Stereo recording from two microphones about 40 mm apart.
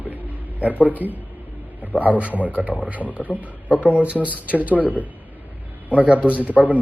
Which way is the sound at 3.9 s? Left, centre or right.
Right.